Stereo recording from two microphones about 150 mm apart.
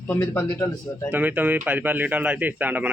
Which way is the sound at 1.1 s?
10° right (ahead or behind).